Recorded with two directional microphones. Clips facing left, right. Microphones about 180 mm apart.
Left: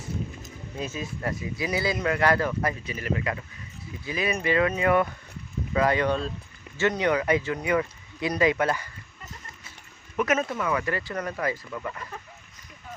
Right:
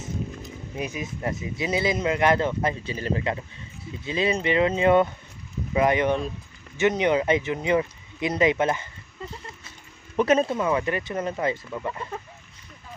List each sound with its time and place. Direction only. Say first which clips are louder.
0.8 s speech: right 1 dB; 15° right (ahead or behind)
10.2 s speech: right 5 dB; 30° right (ahead or behind)